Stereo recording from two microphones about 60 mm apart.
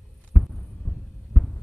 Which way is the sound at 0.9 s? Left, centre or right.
Centre.